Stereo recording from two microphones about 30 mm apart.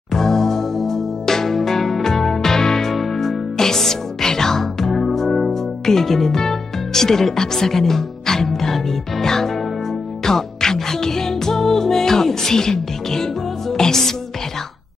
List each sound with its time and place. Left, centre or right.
0.1 s music: centre